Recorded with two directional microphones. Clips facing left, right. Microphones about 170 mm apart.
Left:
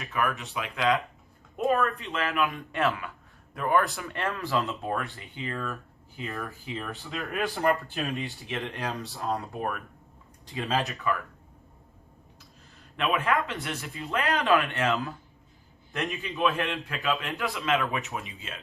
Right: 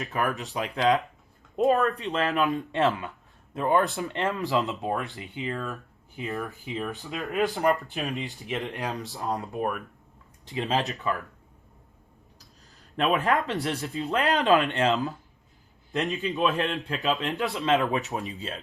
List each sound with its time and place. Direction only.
0.0 s speech: 40° right (ahead or behind)
2.6 s speech: 25° right (ahead or behind)
8.0 s speech: centre (ahead or behind)
8.6 s speech: 20° right (ahead or behind)
13.0 s speech: 40° right (ahead or behind)
14.3 s speech: 20° right (ahead or behind)
17.5 s speech: 35° right (ahead or behind)